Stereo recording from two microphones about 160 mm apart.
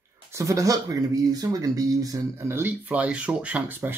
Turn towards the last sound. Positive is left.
turn(degrees=-10)  # may be behind; listen again after turning